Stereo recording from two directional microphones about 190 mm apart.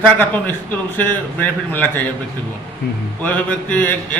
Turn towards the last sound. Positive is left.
turn(degrees=10)  # may be behind; listen again after turning